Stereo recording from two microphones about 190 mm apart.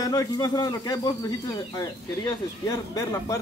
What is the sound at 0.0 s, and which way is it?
Speech, 20° left (ahead or behind).